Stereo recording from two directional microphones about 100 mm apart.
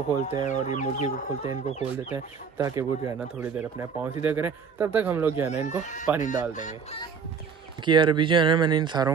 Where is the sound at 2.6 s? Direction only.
35° right (ahead or behind).